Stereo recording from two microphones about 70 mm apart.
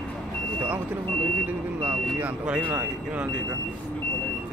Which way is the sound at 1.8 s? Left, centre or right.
Centre.